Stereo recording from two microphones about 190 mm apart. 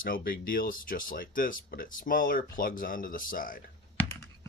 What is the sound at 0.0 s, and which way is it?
Speech, 50° left (ahead or behind).